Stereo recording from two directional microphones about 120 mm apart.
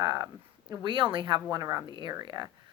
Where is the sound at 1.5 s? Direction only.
30° right (ahead or behind).